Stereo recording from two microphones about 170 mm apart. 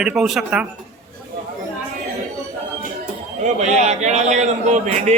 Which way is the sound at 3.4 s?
45° right (ahead or behind).